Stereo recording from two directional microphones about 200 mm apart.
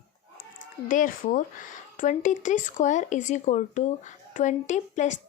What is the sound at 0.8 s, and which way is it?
Speech, 40° left (ahead or behind).